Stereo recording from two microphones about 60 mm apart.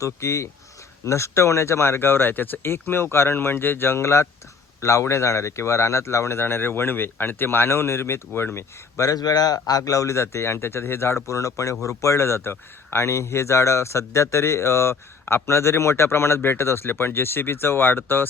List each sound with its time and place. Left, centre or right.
0.0 s speech: left
6.4 s speech: left
9.0 s speech: left